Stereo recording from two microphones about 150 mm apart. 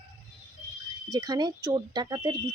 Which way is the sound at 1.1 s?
25° right (ahead or behind).